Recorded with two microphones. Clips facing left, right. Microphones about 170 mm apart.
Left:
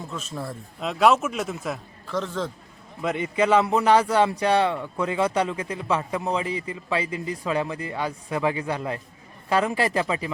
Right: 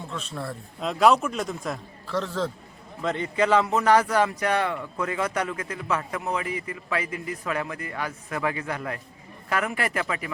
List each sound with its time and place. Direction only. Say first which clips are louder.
0.3 s a man's voice: left 1 dB; centre (ahead or behind)
3.0 s a man's voice: left 1 dB; 15° left (ahead or behind)